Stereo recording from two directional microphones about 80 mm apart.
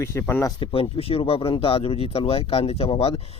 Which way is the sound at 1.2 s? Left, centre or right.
Left.